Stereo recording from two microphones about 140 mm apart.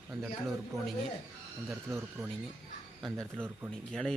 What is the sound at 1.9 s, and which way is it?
Speech, 15° right (ahead or behind).